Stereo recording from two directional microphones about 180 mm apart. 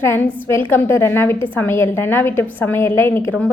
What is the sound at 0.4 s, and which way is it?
A woman's voice, 15° left (ahead or behind).